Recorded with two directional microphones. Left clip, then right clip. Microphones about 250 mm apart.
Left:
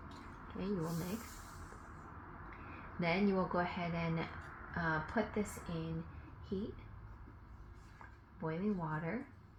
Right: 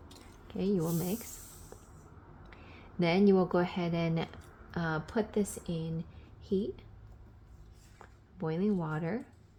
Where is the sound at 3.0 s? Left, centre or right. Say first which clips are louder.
Right 8 dB; right.